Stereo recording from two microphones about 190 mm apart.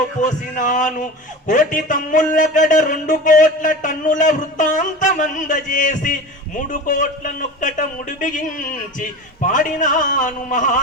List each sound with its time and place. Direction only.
0.2 s speech: 40° left (ahead or behind)